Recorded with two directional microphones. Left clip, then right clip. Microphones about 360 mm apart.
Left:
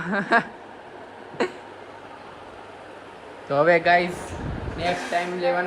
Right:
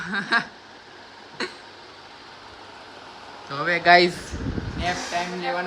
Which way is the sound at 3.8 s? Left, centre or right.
Right.